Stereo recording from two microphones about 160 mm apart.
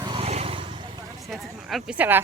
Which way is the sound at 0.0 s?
30° right (ahead or behind).